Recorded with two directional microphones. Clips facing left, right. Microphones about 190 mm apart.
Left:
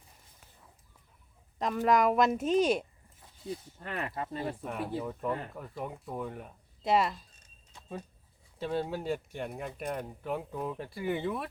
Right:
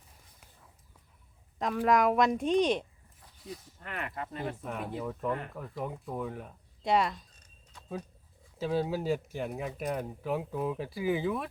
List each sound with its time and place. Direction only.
1.5 s speech: centre (ahead or behind)
3.2 s speech: 25° left (ahead or behind)
4.5 s speech: centre (ahead or behind)
8.5 s speech: centre (ahead or behind)